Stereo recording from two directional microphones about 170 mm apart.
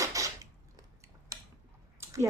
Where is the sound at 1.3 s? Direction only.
20° right (ahead or behind).